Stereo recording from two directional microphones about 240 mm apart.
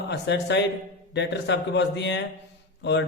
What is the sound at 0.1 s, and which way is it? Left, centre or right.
A man's voice, left.